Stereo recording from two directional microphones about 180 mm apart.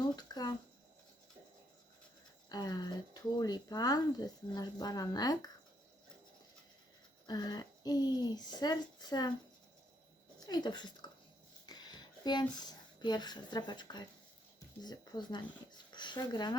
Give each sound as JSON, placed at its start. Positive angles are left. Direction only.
{"t": 0.2, "sound": "speech", "side_deg": 20}
{"t": 2.5, "sound": "speech", "side_deg": 20}
{"t": 7.3, "sound": "speech", "side_deg": 25}
{"t": 10.4, "sound": "speech", "side_deg": 20}